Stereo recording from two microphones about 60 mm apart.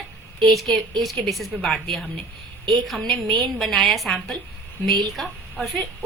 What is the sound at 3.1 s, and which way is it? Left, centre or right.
Speech, centre.